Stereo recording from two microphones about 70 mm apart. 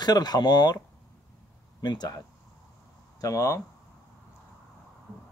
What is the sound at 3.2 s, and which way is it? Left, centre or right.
Speech, left.